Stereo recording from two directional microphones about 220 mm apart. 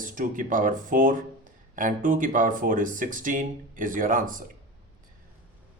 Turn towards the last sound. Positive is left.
turn(degrees=-40)  # may be behind; listen again after turning